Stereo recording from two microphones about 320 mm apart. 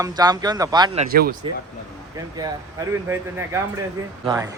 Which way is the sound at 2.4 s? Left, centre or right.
Centre.